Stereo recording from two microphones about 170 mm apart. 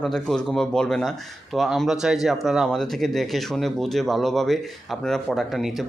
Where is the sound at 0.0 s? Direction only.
5° left (ahead or behind).